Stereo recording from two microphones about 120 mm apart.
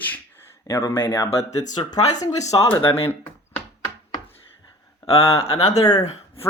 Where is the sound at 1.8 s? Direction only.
50° left (ahead or behind).